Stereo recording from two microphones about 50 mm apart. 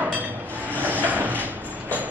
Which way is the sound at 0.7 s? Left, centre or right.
Right.